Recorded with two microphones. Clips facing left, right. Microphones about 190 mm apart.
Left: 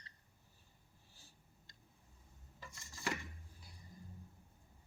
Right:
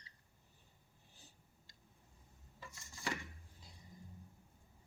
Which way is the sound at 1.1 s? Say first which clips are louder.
Right 2 dB; 20° right (ahead or behind).